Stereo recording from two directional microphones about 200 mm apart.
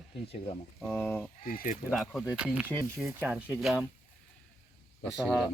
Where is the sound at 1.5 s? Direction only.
45° left (ahead or behind).